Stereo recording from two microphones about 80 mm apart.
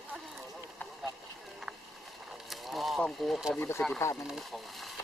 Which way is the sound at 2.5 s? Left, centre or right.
Centre.